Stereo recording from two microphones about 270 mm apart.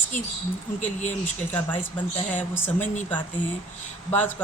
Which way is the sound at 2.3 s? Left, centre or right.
Centre.